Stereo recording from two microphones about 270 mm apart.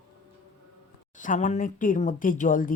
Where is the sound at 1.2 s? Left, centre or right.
Left.